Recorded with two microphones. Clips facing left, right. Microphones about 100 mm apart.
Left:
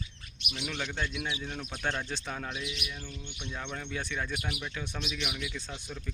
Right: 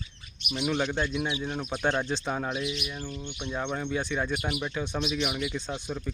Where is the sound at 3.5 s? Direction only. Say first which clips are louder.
Right 8 dB; 25° right (ahead or behind).